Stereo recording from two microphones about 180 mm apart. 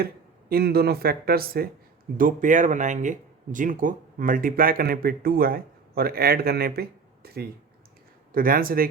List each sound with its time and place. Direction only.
0.0 s speech: 60° right (ahead or behind)